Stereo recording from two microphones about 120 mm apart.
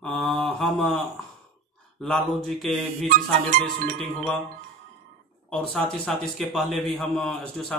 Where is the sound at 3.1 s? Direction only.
90° right.